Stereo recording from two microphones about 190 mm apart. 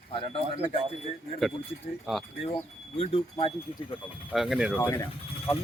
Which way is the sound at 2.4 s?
30° left (ahead or behind).